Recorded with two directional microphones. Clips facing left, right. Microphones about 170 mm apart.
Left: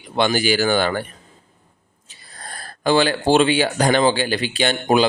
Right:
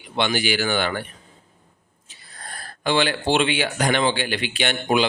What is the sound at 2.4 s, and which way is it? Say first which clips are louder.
Speech: left 4 dB; 40° left (ahead or behind).